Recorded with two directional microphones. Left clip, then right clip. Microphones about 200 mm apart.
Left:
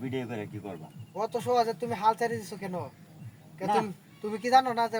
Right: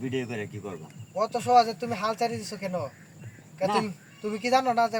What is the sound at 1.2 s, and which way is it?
Speech, 15° left (ahead or behind).